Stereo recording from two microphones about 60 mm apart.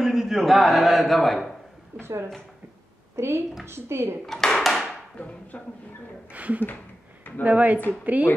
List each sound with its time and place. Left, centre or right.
0.0 s a man's voice: centre
2.0 s a woman's voice: right
4.3 s a sound: centre
5.5 s speech: left
6.3 s speech: right